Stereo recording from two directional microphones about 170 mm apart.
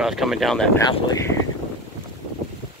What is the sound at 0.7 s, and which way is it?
Speech, 20° left (ahead or behind).